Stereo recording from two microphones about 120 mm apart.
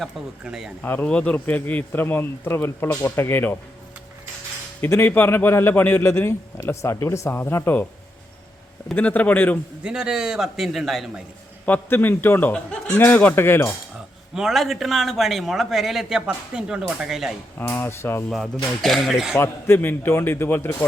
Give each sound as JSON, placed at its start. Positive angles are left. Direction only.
{"t": 0.0, "sound": "a man's voice", "side_deg": -5}
{"t": 0.8, "sound": "a man's voice", "side_deg": 10}
{"t": 4.8, "sound": "a man's voice", "side_deg": 20}
{"t": 9.0, "sound": "a man's voice", "side_deg": 15}
{"t": 9.8, "sound": "a man's voice", "side_deg": -5}
{"t": 11.6, "sound": "a man's voice", "side_deg": 15}
{"t": 14.3, "sound": "a man's voice", "side_deg": -5}
{"t": 17.6, "sound": "a man's voice", "side_deg": 20}
{"t": 18.3, "sound": "a man's voice", "side_deg": 0}
{"t": 19.4, "sound": "a man's voice", "side_deg": 20}